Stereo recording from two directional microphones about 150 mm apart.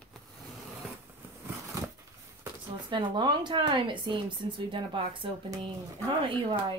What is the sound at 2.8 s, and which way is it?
A woman's voice, 30° right (ahead or behind).